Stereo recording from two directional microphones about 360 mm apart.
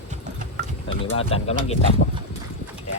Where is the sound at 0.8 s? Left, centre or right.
Centre.